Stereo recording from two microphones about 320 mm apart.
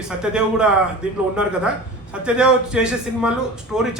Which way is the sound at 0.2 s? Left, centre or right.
Centre.